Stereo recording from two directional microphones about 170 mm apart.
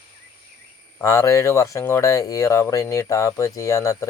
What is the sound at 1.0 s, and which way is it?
Speech, 20° left (ahead or behind).